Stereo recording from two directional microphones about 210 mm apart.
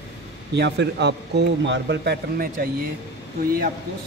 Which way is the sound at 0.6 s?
55° right (ahead or behind).